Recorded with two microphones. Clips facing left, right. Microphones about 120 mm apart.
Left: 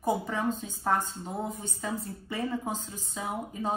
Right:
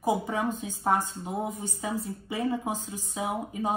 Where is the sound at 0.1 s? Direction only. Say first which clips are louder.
Right 1 dB; 15° right (ahead or behind).